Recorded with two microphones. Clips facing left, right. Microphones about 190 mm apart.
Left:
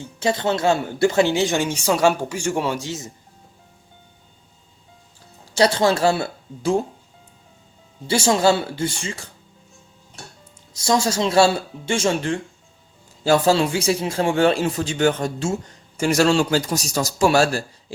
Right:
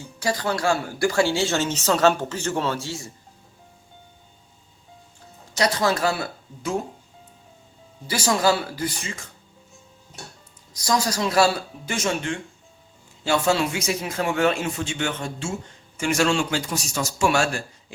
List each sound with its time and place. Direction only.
0.2 s speech: 25° left (ahead or behind)
5.5 s speech: 30° left (ahead or behind)
8.0 s speech: 25° left (ahead or behind)
10.8 s a man's voice: 25° left (ahead or behind)